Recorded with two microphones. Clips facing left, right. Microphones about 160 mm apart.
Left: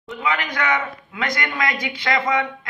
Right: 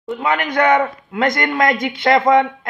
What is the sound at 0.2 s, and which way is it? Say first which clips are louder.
A man's voice: right 6 dB; 50° right (ahead or behind).